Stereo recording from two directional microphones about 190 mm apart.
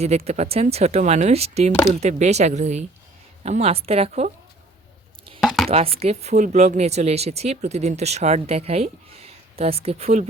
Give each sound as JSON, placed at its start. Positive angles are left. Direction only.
{"t": 0.3, "sound": "speech", "side_deg": -35}
{"t": 5.4, "sound": "a sound", "side_deg": 0}
{"t": 5.6, "sound": "speech", "side_deg": -30}